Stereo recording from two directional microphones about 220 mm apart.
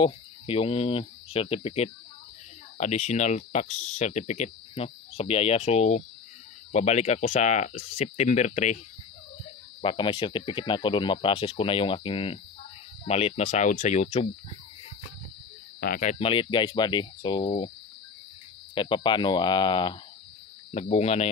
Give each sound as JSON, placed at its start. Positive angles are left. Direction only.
{"t": 0.0, "sound": "speech", "side_deg": 25}
{"t": 9.8, "sound": "speech", "side_deg": 20}
{"t": 15.8, "sound": "speech", "side_deg": 40}
{"t": 18.8, "sound": "speech", "side_deg": 20}